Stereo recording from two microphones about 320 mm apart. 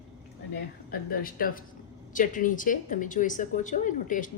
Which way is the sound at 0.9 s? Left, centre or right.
Left.